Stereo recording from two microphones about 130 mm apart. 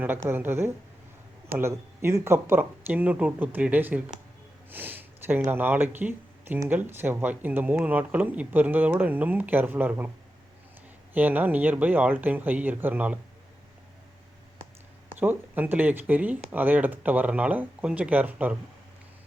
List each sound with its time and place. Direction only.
0.3 s speech: 15° right (ahead or behind)
11.1 s speech: 15° right (ahead or behind)
15.2 s speech: 15° right (ahead or behind)